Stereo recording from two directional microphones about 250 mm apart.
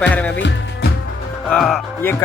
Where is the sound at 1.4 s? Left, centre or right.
Centre.